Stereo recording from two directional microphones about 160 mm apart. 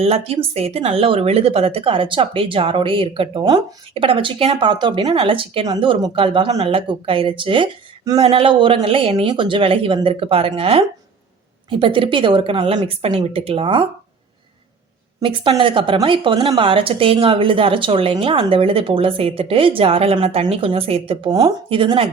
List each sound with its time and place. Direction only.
0.0 s speech: 40° right (ahead or behind)
15.2 s speech: 30° right (ahead or behind)